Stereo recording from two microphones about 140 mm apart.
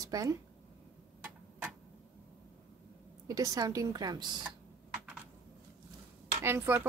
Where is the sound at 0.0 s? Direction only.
25° right (ahead or behind).